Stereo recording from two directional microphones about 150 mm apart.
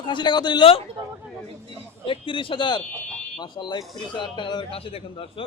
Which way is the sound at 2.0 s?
35° left (ahead or behind).